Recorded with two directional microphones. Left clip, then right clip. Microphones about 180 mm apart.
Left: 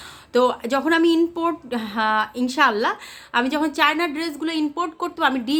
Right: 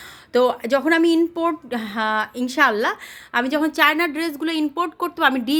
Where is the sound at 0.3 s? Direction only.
25° right (ahead or behind).